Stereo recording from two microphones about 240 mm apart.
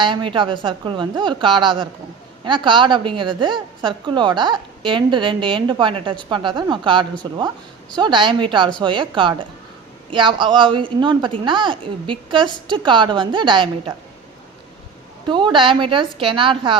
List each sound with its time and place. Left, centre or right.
0.0 s a woman's voice: right
15.3 s a woman's voice: centre